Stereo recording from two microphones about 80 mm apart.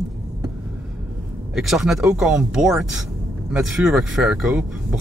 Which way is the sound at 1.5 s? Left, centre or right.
Centre.